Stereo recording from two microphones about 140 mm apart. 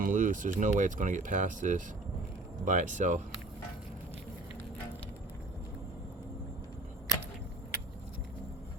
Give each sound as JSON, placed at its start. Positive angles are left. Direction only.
{"t": 0.0, "sound": "speech", "side_deg": -65}